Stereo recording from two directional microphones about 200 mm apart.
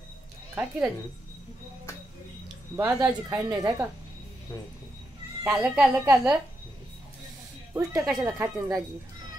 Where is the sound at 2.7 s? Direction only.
15° right (ahead or behind).